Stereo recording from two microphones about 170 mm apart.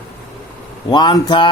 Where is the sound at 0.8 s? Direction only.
25° left (ahead or behind).